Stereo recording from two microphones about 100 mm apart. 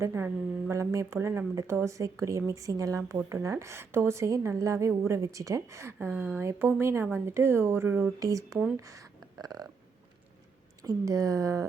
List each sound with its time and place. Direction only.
0.0 s a woman's voice: 25° right (ahead or behind)
6.1 s speech: 10° right (ahead or behind)
6.4 s a woman's voice: 25° right (ahead or behind)
8.2 s a woman's voice: 35° right (ahead or behind)
10.8 s a woman's voice: 35° right (ahead or behind)